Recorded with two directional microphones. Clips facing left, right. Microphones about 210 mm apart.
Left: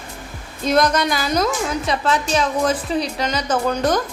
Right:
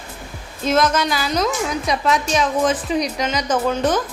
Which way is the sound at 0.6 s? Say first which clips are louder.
Left 1 dB; 5° right (ahead or behind).